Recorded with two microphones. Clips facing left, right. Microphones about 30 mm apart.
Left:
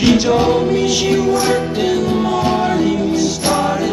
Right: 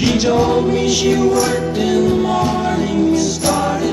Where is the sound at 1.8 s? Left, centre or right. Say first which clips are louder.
Right 1 dB; centre.